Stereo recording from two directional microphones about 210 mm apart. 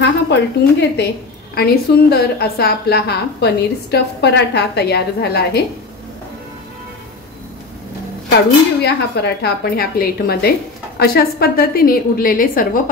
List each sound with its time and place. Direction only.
0.0 s a woman's voice: 55° left (ahead or behind)
8.8 s a woman's voice: 50° left (ahead or behind)